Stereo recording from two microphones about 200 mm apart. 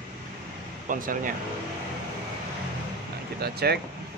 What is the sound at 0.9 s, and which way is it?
Speech, 40° right (ahead or behind).